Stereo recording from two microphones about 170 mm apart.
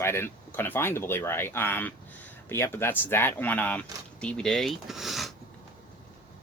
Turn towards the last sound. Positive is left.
turn(degrees=0)  # may be behind; listen again after turning